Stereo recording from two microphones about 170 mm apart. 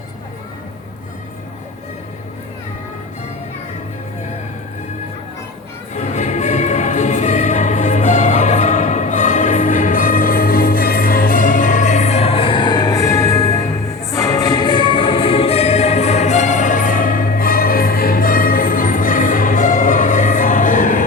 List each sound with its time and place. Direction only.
5.9 s music: 45° left (ahead or behind)